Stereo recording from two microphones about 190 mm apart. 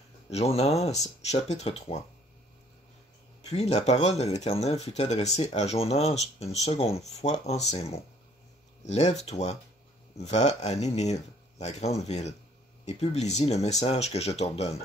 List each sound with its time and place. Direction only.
0.3 s speech: 35° left (ahead or behind)
3.4 s speech: 35° left (ahead or behind)